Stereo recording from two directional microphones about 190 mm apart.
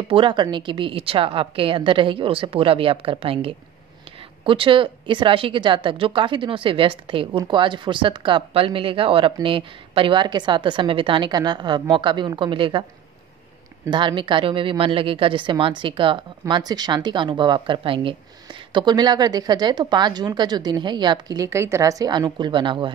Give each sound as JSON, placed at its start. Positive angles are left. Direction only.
{"t": 0.1, "sound": "speech", "side_deg": -25}
{"t": 13.8, "sound": "speech", "side_deg": -25}